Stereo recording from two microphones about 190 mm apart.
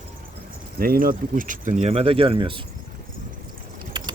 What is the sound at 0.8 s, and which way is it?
Speech, 50° right (ahead or behind).